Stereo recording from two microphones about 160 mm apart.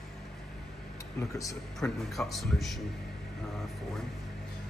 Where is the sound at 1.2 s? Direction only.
20° left (ahead or behind).